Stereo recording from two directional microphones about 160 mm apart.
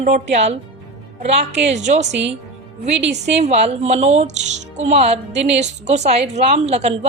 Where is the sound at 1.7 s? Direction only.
45° right (ahead or behind).